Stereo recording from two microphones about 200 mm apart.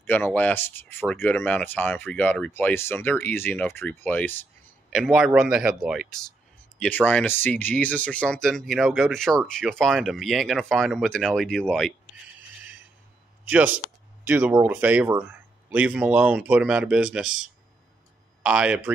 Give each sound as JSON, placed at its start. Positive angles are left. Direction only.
{"t": 0.0, "sound": "speech", "side_deg": 10}
{"t": 6.8, "sound": "speech", "side_deg": 10}
{"t": 13.5, "sound": "speech", "side_deg": -10}